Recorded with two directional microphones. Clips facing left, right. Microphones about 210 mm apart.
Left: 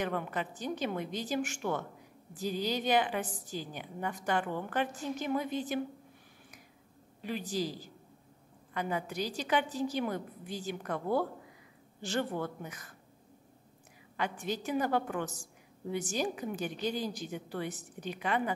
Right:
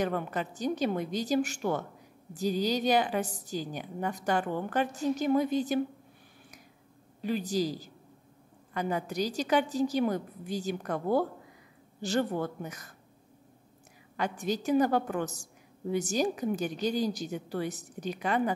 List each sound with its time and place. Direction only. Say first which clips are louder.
0.0 s a woman's voice: right 3 dB; 40° right (ahead or behind)
7.2 s a woman's voice: right 5 dB; 40° right (ahead or behind)
14.1 s a woman's voice: right 4 dB; 40° right (ahead or behind)